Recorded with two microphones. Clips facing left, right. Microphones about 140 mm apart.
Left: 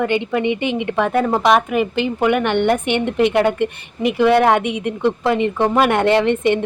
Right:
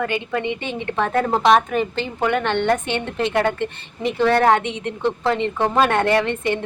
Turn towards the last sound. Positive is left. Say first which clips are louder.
# left 5 dB
turn(degrees=20)  # may be behind; listen again after turning